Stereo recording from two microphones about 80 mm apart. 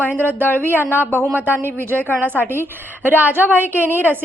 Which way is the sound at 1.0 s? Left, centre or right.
Left.